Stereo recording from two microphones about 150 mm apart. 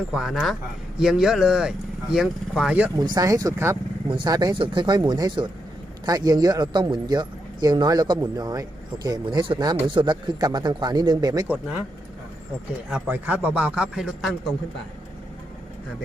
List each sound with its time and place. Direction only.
0.1 s speech: centre (ahead or behind)
3.0 s speech: 25° right (ahead or behind)
11.4 s a man's voice: 10° right (ahead or behind)
12.9 s a man's voice: 10° right (ahead or behind)